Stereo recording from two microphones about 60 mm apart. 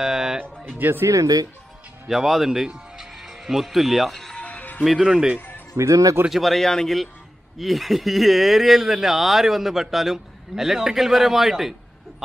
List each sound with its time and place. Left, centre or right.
0.0 s music: centre
0.7 s speech: right
1.0 s speech: right
2.0 s speech: centre
3.0 s music: centre
4.4 s music: left
4.8 s speech: centre
5.8 s speech: right
6.3 s speech: centre